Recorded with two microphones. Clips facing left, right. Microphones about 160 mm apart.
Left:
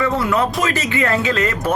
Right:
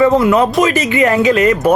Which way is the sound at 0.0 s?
20° right (ahead or behind).